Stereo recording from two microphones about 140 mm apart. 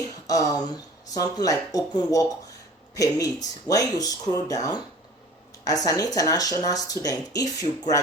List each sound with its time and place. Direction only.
0.3 s speech: 25° left (ahead or behind)